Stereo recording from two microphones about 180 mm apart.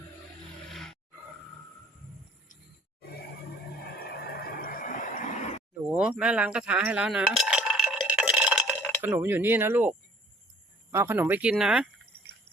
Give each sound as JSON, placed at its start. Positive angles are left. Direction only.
{"t": 0.7, "sound": "roar", "side_deg": 0}
{"t": 3.8, "sound": "vehicle", "side_deg": 60}
{"t": 5.8, "sound": "chink", "side_deg": -5}
{"t": 9.0, "sound": "speech", "side_deg": -10}
{"t": 10.9, "sound": "speech", "side_deg": -15}